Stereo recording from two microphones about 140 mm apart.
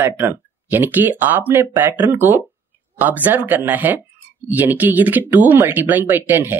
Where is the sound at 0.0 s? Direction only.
15° right (ahead or behind).